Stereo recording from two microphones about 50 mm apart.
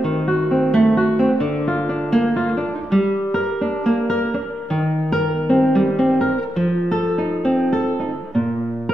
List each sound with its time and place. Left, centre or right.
0.3 s music: centre
3.3 s music: centre